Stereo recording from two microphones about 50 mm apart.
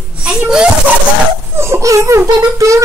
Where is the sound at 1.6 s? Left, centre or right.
Right.